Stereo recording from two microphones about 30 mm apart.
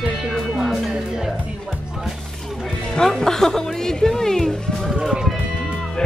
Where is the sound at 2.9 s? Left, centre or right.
Centre.